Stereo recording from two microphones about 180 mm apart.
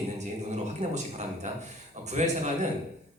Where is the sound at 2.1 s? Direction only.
40° right (ahead or behind).